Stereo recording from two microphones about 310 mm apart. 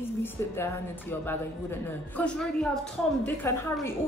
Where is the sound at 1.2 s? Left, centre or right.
Centre.